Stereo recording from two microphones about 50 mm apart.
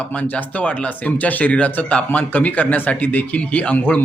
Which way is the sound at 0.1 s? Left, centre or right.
Left.